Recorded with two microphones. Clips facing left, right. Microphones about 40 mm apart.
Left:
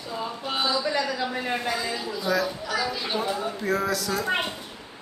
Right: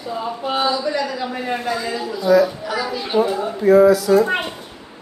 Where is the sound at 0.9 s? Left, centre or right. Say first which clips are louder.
Right 4 dB; centre.